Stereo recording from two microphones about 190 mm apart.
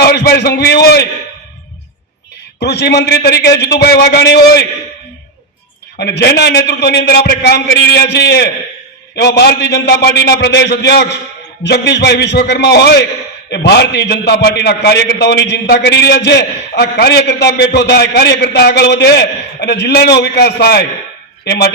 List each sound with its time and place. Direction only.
0.0 s a man's voice: 60° left (ahead or behind)
2.6 s a man's voice: 65° left (ahead or behind)
6.0 s a man's voice: 60° left (ahead or behind)